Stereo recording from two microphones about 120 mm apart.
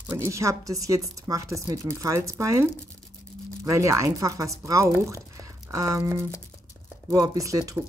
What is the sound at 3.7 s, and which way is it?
Speech, 25° right (ahead or behind).